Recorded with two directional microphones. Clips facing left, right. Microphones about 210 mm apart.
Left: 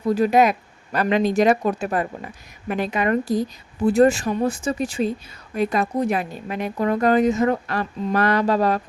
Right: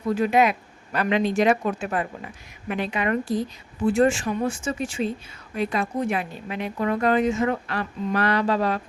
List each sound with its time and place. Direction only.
0.1 s a woman's voice: 40° left (ahead or behind)